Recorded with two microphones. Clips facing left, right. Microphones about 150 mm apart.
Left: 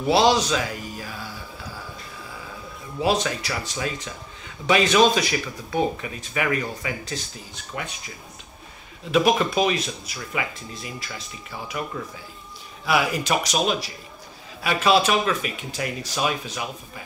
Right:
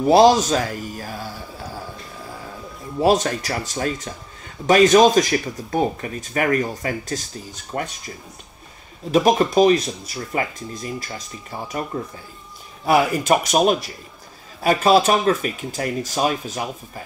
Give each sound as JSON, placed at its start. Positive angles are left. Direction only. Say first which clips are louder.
{"t": 0.0, "sound": "speech", "louder": "right 6 dB", "side_deg": -45}
{"t": 3.0, "sound": "speech", "louder": "right 5 dB", "side_deg": -45}
{"t": 9.1, "sound": "speech", "louder": "right 4 dB", "side_deg": -40}